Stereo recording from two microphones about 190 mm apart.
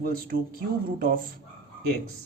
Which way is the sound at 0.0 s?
50° right (ahead or behind).